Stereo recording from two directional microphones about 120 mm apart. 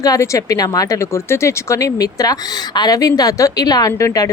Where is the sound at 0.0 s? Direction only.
25° left (ahead or behind).